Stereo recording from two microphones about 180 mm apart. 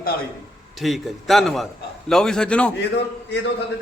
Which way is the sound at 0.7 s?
Centre (ahead or behind).